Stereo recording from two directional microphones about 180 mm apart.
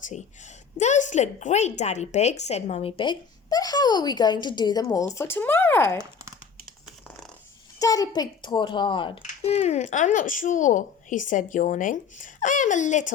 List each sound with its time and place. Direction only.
0.8 s a woman's voice: 40° left (ahead or behind); by 6.0 s 15° left (ahead or behind)
7.8 s a child's voice: 20° left (ahead or behind); by 13.1 s 45° left (ahead or behind)